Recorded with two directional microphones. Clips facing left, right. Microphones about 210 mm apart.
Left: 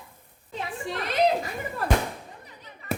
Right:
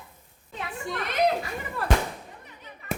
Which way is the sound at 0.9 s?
30° left (ahead or behind).